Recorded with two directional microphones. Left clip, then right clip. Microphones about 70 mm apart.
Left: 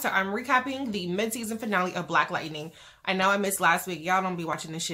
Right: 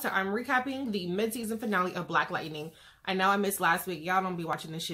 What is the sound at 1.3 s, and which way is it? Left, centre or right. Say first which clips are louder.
A woman's voice: left 3 dB; left.